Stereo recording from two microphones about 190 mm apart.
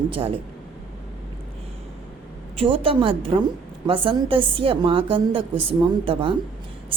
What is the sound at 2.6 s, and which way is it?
A woman's voice, 30° right (ahead or behind).